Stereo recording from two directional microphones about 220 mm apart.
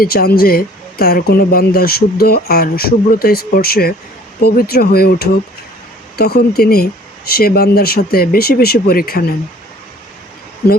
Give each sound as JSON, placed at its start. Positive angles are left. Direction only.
{"t": 0.0, "sound": "speech", "side_deg": 45}